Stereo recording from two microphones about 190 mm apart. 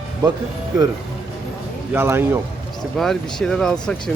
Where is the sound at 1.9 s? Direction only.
10° right (ahead or behind).